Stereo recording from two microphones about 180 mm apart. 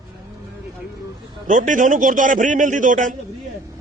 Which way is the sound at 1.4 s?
45° right (ahead or behind).